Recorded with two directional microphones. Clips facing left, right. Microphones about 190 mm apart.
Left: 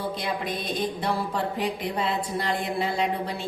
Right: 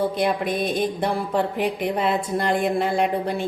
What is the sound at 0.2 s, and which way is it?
Speech, 55° right (ahead or behind).